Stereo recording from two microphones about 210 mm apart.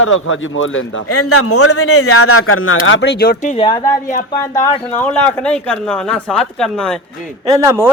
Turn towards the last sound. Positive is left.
turn(degrees=-10)  # may be behind; listen again after turning